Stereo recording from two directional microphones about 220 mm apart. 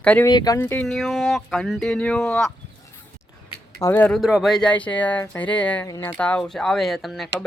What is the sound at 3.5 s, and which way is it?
Speech, 15° left (ahead or behind).